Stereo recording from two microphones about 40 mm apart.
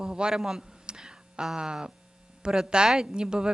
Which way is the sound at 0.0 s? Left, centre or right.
Centre.